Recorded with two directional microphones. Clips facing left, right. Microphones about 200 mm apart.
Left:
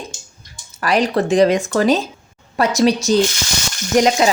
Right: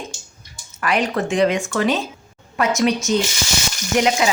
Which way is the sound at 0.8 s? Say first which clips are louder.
Left 4 dB; 35° left (ahead or behind).